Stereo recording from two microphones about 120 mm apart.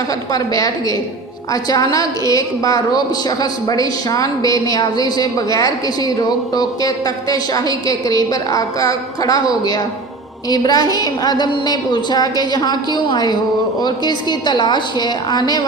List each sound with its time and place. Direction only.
0.3 s a woman's voice: 30° left (ahead or behind)